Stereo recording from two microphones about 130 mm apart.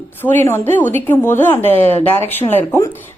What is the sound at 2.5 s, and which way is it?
Speech, 20° left (ahead or behind).